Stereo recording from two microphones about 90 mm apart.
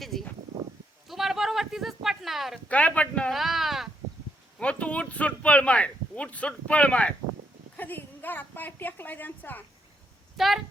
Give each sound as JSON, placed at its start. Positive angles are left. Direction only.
{"t": 0.0, "sound": "speech", "side_deg": 5}
{"t": 1.0, "sound": "a sound", "side_deg": 0}
{"t": 2.6, "sound": "speech", "side_deg": 15}
{"t": 3.3, "sound": "a sound", "side_deg": 0}
{"t": 4.6, "sound": "a woman's voice", "side_deg": 15}
{"t": 10.3, "sound": "a woman's voice", "side_deg": 0}